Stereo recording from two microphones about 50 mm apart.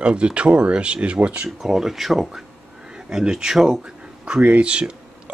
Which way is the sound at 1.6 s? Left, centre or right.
Centre.